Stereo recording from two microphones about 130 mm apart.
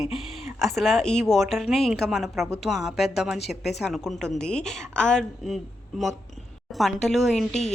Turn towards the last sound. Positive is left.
turn(degrees=60)  # may be behind; listen again after turning